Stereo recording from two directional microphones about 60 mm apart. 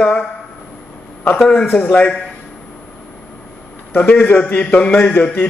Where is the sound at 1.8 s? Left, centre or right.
Left.